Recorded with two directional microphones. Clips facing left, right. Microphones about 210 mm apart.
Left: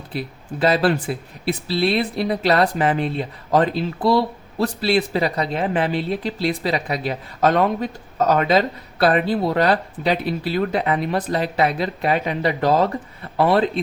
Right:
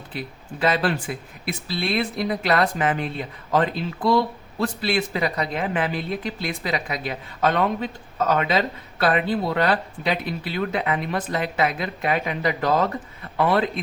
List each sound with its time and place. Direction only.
0.1 s speech: 35° left (ahead or behind)